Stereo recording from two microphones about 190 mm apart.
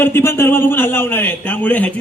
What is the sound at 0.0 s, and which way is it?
A man's voice, 10° left (ahead or behind).